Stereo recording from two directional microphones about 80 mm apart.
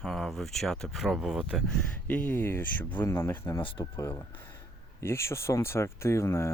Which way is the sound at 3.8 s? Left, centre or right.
Left.